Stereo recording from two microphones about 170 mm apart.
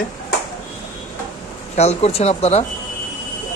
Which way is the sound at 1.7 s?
40° left (ahead or behind).